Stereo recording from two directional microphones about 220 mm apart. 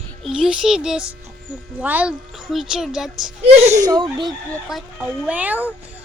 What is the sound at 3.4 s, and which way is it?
Speech, 30° right (ahead or behind).